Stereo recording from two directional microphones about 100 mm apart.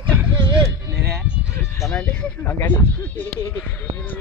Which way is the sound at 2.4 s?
20° left (ahead or behind).